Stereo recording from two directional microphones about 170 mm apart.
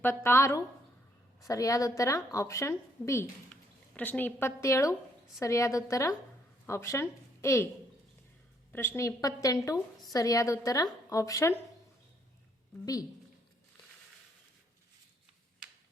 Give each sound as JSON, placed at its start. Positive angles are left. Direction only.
{"t": 0.0, "sound": "a woman's voice", "side_deg": 15}
{"t": 8.7, "sound": "a woman's voice", "side_deg": 10}
{"t": 12.8, "sound": "a woman's voice", "side_deg": 20}